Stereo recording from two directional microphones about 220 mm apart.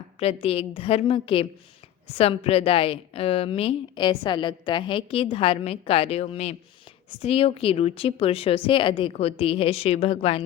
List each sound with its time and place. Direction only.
0.2 s a woman's voice: 25° left (ahead or behind)